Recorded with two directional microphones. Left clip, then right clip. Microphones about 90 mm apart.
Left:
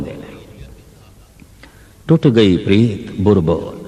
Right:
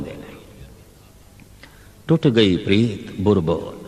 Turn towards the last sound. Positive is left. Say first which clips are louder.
# left 4 dB
turn(degrees=-40)  # may be behind; listen again after turning